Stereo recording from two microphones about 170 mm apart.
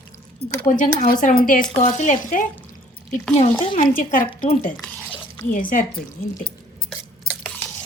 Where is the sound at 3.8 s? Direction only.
50° left (ahead or behind).